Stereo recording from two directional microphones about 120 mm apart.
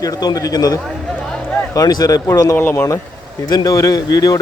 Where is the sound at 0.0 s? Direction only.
30° left (ahead or behind).